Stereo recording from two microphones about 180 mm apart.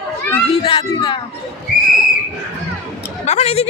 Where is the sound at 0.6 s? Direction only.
25° left (ahead or behind).